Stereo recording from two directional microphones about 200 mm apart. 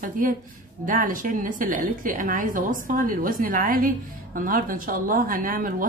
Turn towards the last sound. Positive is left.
turn(degrees=-45)  # may be behind; listen again after turning